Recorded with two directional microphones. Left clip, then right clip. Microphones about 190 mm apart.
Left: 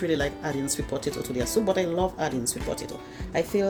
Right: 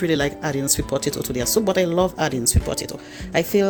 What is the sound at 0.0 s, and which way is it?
Speech, 40° right (ahead or behind).